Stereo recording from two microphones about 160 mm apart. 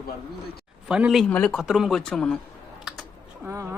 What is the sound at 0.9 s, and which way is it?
Speech, 5° right (ahead or behind).